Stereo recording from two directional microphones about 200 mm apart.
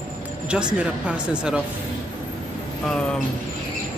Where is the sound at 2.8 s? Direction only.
5° left (ahead or behind).